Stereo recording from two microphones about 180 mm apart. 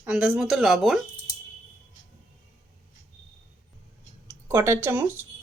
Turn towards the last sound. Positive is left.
turn(degrees=-10)  # may be behind; listen again after turning